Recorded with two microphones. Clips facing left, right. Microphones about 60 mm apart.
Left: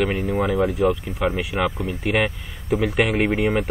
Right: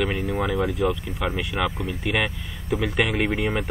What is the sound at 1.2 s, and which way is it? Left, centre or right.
Speech, left.